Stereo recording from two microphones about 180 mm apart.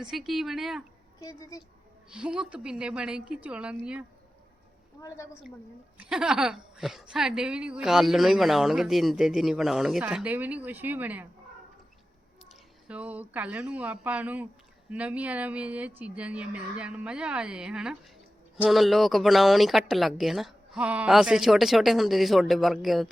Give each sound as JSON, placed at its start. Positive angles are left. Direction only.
{"t": 0.0, "sound": "a woman's voice", "side_deg": 0}
{"t": 1.2, "sound": "a woman's voice", "side_deg": 20}
{"t": 2.0, "sound": "a woman's voice", "side_deg": -5}
{"t": 4.9, "sound": "a woman's voice", "side_deg": 15}
{"t": 6.0, "sound": "a woman's voice", "side_deg": -5}
{"t": 12.5, "sound": "a woman's voice", "side_deg": -5}